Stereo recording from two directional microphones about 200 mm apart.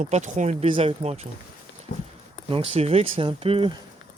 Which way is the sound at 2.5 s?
30° right (ahead or behind).